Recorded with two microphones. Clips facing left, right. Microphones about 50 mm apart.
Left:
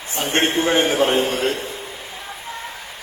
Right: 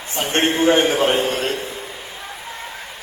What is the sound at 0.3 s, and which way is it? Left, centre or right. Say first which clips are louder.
Speech: right 1 dB; left.